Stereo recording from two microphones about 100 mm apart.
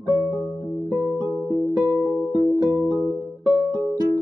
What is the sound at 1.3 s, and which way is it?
Music, 30° right (ahead or behind).